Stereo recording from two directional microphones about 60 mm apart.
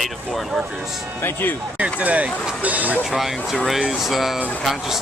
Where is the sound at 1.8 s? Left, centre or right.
Right.